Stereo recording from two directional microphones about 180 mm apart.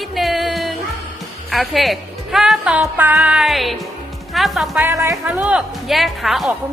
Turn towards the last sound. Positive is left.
turn(degrees=0)  # may be behind; listen again after turning